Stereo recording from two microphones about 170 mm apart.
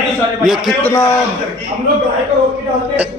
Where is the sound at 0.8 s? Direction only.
15° left (ahead or behind).